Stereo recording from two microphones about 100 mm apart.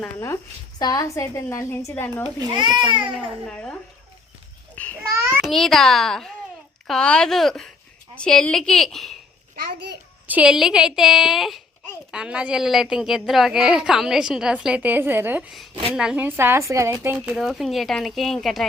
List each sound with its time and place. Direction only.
0.8 s a woman's voice: 40° left (ahead or behind); by 2.2 s 20° left (ahead or behind)
2.4 s a child's voice: 45° right (ahead or behind)
3.5 s speech: 10° left (ahead or behind)
4.7 s babbling: 15° left (ahead or behind)
5.4 s speech: centre (ahead or behind)
10.2 s a woman's voice: 15° right (ahead or behind)
10.5 s a woman's voice: 5° right (ahead or behind)
15.4 s a woman's voice: centre (ahead or behind)
16.2 s speech: 20° right (ahead or behind)
17.2 s speech: centre (ahead or behind)